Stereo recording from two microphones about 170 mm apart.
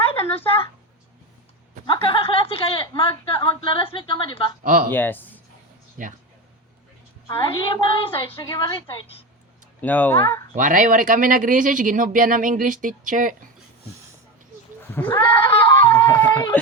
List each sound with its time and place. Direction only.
0.3 s speech: 15° left (ahead or behind)
1.9 s a woman's voice: 30° left (ahead or behind)
4.6 s speech: 50° right (ahead or behind)
4.9 s speech: 10° left (ahead or behind)
6.0 s speech: 50° right (ahead or behind)
7.3 s a woman's voice: 30° left (ahead or behind)
9.8 s speech: 10° left (ahead or behind)
10.5 s speech: 50° right (ahead or behind)
14.8 s sheep: 10° left (ahead or behind)
15.1 s a woman's voice: 30° left (ahead or behind)
16.0 s speech: 15° left (ahead or behind)